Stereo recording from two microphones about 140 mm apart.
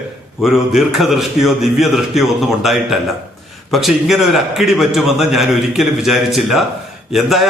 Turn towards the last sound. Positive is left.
turn(degrees=0)  # may be behind; listen again after turning